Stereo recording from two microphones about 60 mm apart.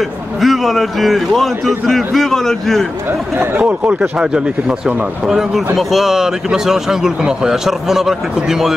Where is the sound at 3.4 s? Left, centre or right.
Right.